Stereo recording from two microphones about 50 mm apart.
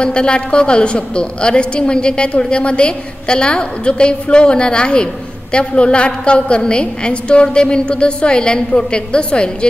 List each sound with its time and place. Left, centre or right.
0.0 s a woman's voice: centre